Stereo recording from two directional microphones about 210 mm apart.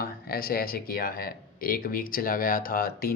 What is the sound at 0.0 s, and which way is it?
Speech, 45° left (ahead or behind).